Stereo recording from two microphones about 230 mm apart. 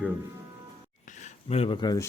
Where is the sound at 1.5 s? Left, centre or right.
Left.